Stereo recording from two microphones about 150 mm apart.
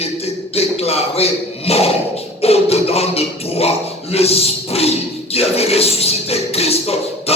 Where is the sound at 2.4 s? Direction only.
40° left (ahead or behind).